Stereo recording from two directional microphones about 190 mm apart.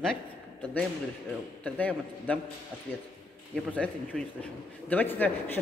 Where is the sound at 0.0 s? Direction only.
5° left (ahead or behind).